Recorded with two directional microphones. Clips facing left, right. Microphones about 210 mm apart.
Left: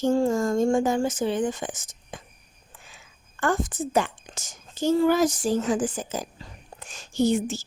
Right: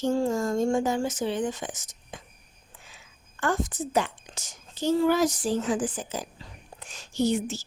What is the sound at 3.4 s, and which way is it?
Speech, 50° left (ahead or behind).